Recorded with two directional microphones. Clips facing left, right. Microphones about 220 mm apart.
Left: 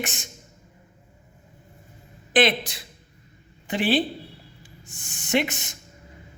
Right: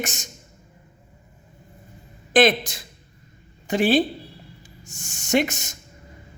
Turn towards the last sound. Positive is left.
turn(degrees=-45)  # may be behind; listen again after turning